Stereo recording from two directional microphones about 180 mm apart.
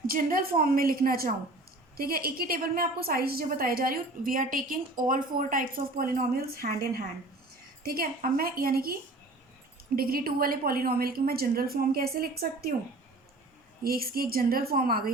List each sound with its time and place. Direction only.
0.1 s a woman's voice: 50° right (ahead or behind)
13.8 s a woman's voice: 55° right (ahead or behind)